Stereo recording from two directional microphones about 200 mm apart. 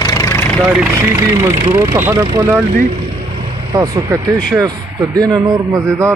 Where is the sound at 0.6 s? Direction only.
10° right (ahead or behind).